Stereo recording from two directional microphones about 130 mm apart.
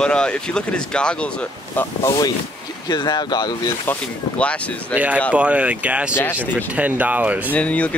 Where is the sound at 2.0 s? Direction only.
30° left (ahead or behind).